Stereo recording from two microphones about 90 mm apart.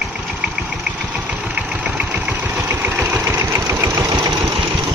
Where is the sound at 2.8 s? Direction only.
20° right (ahead or behind).